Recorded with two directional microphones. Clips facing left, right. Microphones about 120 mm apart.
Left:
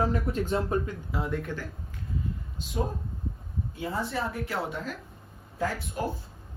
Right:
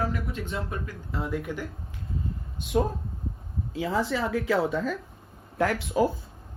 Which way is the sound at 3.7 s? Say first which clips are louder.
Right 5 dB; 90° right.